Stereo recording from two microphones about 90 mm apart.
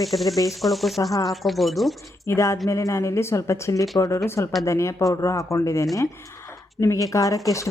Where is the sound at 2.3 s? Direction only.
35° left (ahead or behind).